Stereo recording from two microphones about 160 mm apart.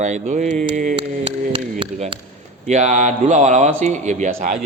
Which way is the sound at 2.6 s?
50° right (ahead or behind).